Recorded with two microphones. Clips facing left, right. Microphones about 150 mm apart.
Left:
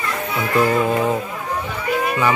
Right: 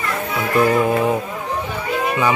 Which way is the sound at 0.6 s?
15° right (ahead or behind).